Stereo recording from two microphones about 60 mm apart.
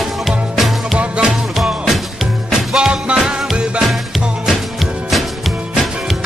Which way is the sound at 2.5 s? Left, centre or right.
Centre.